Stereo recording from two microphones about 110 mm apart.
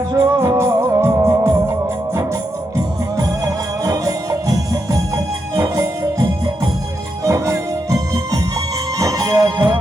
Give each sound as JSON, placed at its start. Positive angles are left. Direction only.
{"t": 0.1, "sound": "music", "side_deg": -40}
{"t": 0.3, "sound": "music", "side_deg": -25}
{"t": 7.3, "sound": "music", "side_deg": -30}